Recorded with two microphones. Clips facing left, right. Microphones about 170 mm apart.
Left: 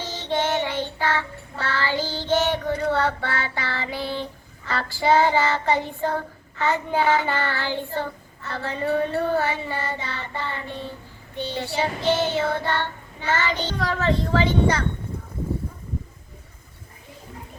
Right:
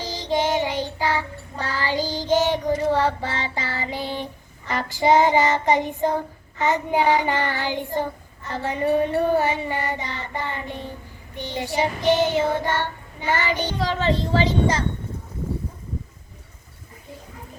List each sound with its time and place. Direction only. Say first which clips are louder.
0.0 s child singing: right 2 dB; 15° right (ahead or behind)